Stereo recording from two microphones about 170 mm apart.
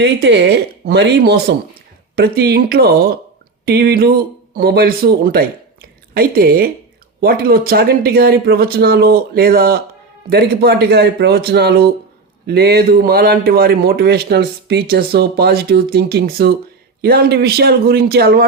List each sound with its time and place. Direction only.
0.0 s speech: 90° right
2.1 s a man's voice: 70° right (ahead or behind)